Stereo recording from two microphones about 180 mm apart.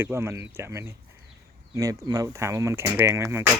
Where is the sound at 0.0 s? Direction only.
15° right (ahead or behind).